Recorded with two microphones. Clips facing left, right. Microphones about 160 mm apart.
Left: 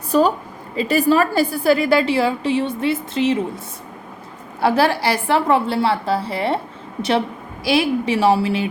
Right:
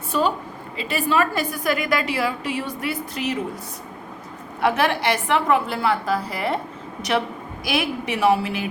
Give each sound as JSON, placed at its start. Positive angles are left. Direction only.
{"t": 0.1, "sound": "a woman's voice", "side_deg": 40}
{"t": 4.6, "sound": "a woman's voice", "side_deg": 35}
{"t": 7.6, "sound": "a woman's voice", "side_deg": 30}